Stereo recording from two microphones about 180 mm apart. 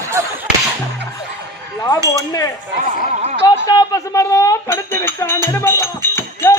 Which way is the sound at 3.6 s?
20° left (ahead or behind).